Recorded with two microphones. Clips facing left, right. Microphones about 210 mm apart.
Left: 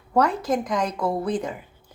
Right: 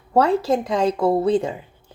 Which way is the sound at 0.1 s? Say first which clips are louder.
Right 4 dB; 30° right (ahead or behind).